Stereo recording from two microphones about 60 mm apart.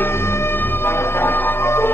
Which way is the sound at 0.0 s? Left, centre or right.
Left.